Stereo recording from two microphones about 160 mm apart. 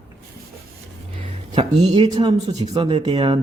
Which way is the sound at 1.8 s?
40° right (ahead or behind).